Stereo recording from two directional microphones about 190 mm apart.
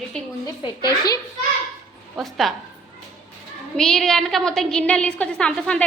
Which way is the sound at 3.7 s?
5° left (ahead or behind).